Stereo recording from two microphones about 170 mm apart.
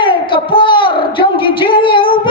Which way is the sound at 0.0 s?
30° left (ahead or behind).